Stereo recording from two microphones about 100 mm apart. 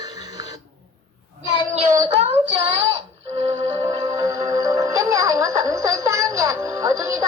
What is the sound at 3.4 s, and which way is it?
Music, 55° right (ahead or behind).